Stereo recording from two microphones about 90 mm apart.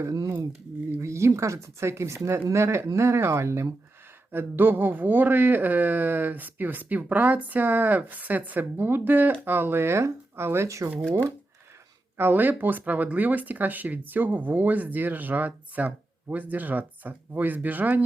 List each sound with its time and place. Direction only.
0.0 s speech: 35° right (ahead or behind)
12.1 s speech: 20° right (ahead or behind)